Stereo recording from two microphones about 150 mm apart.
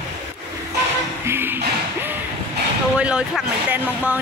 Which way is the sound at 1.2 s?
15° right (ahead or behind).